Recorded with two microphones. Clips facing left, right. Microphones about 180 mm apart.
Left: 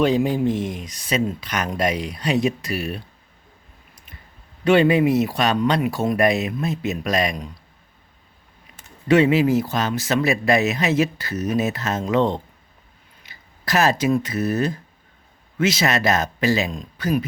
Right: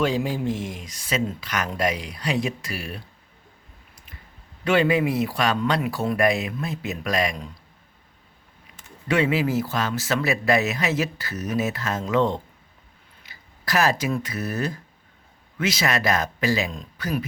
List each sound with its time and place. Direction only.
0.0 s speech: 20° left (ahead or behind)
4.6 s speech: 25° left (ahead or behind)
9.0 s speech: 25° left (ahead or behind)